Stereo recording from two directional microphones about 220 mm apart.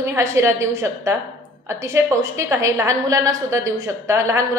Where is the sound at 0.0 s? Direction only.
10° right (ahead or behind).